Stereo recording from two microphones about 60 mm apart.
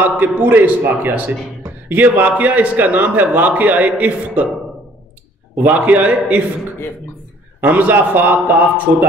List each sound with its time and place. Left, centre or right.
0.0 s a man's voice: right
5.6 s a man's voice: right
7.6 s a man's voice: right